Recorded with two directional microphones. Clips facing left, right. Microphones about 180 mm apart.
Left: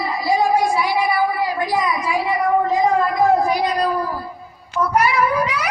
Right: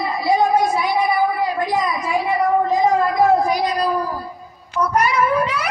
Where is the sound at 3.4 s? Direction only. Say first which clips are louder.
Even; 10° right (ahead or behind).